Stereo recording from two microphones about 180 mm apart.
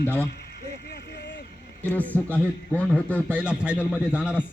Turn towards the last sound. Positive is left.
turn(degrees=-5)  # may be behind; listen again after turning